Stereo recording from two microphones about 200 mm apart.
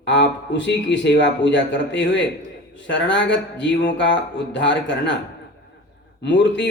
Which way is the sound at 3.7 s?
65° left (ahead or behind).